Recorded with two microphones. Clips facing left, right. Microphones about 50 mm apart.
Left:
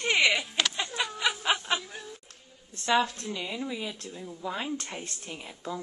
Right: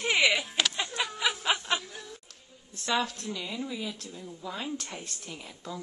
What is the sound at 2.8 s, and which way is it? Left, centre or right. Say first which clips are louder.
A woman's voice: left 4 dB; centre.